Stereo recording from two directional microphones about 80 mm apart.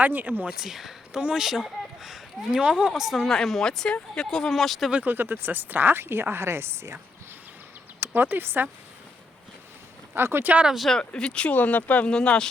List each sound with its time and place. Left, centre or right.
0.0 s speech: right
0.5 s speech: centre
4.9 s speech: centre
5.1 s speech: right
8.0 s speech: right
10.2 s speech: right
10.7 s speech: centre
10.9 s speech: centre